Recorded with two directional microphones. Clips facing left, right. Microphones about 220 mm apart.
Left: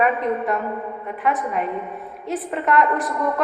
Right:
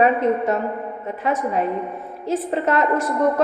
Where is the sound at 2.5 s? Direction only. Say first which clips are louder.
Left 2 dB; 30° right (ahead or behind).